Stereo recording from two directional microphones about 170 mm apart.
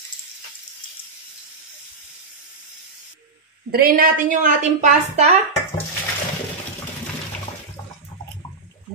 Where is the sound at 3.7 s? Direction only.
60° right (ahead or behind); by 5.4 s 40° right (ahead or behind).